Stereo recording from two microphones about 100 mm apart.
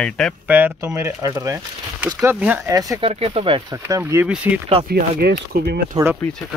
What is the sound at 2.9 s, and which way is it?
Speech, 65° right (ahead or behind).